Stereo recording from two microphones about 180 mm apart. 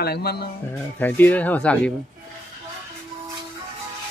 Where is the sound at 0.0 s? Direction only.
60° left (ahead or behind).